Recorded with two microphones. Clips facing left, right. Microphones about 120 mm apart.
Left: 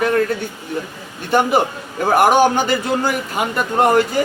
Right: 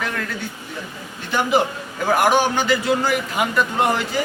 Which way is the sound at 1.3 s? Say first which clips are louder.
Left 3 dB; 50° left (ahead or behind).